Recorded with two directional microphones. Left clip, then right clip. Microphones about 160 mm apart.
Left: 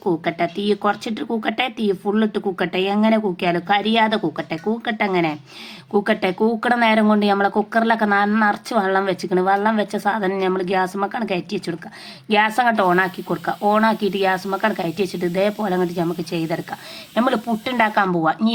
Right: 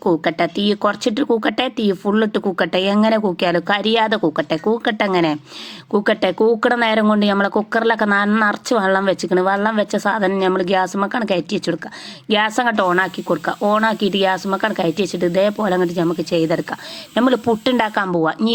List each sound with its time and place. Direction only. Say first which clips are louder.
0.0 s speech: right 4 dB; 25° right (ahead or behind)